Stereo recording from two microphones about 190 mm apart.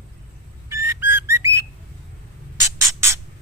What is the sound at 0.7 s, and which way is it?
Whistle, 15° right (ahead or behind).